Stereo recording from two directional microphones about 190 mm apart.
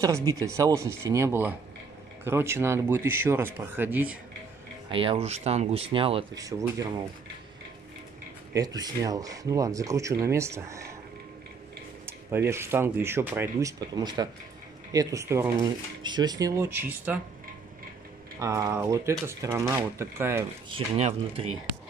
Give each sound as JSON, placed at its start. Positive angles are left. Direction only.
{"t": 0.0, "sound": "speech", "side_deg": -20}
{"t": 4.9, "sound": "speech", "side_deg": -30}
{"t": 6.3, "sound": "speech", "side_deg": -20}
{"t": 8.5, "sound": "speech", "side_deg": -20}
{"t": 12.1, "sound": "speech", "side_deg": -10}
{"t": 18.4, "sound": "speech", "side_deg": -15}
{"t": 20.7, "sound": "speech", "side_deg": -30}